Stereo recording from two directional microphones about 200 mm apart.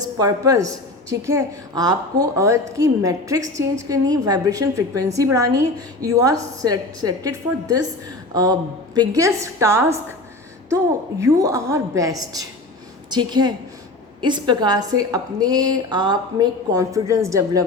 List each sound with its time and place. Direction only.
0.2 s a woman's voice: 15° right (ahead or behind)
11.2 s a woman's voice: 15° right (ahead or behind)